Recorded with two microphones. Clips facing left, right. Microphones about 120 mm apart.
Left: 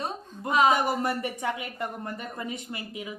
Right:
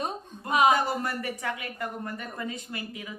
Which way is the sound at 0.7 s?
20° left (ahead or behind).